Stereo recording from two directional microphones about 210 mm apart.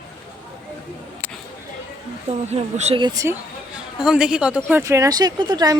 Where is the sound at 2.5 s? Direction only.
30° right (ahead or behind).